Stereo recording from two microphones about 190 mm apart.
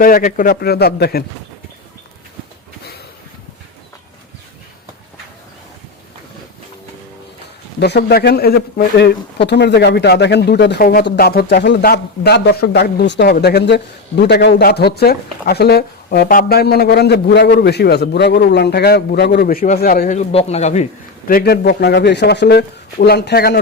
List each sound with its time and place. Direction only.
0.0 s a man's voice: 45° left (ahead or behind)
7.8 s a man's voice: 60° left (ahead or behind); by 20.8 s 35° left (ahead or behind)
21.2 s a man's voice: 55° left (ahead or behind)